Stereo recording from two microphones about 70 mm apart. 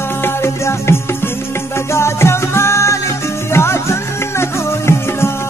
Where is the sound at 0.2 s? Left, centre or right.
Left.